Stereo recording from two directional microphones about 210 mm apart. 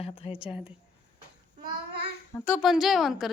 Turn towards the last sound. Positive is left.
turn(degrees=0)  # may be behind; listen again after turning